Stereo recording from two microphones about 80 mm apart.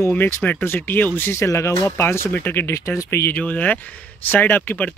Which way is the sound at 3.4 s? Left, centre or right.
Centre.